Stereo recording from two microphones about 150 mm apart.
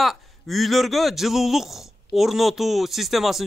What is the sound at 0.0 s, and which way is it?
A man's voice, centre (ahead or behind).